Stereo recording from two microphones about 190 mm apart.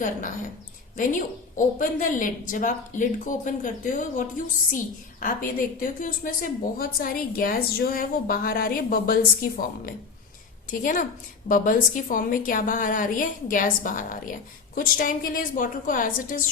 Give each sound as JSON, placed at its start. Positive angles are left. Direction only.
{"t": 0.9, "sound": "a woman's voice", "side_deg": 45}